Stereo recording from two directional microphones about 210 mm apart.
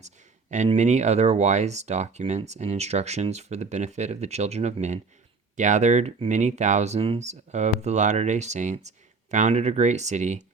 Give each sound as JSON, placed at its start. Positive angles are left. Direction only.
{"t": 0.5, "sound": "speech", "side_deg": -35}